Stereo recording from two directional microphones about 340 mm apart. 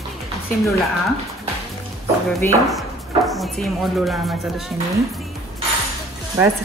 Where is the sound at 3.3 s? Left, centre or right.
Centre.